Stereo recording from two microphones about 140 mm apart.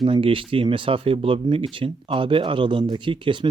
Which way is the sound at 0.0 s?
40° right (ahead or behind).